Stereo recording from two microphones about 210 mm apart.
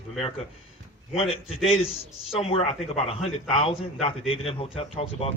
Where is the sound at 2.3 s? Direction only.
30° left (ahead or behind).